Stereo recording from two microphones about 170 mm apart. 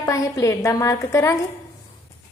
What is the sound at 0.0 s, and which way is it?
A woman's voice, 20° left (ahead or behind).